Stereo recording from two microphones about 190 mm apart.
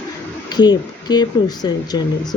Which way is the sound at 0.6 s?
20° left (ahead or behind).